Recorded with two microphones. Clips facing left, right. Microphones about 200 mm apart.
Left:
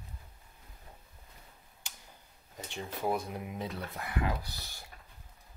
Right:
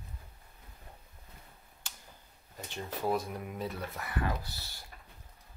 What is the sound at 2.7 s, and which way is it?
Speech, 15° left (ahead or behind).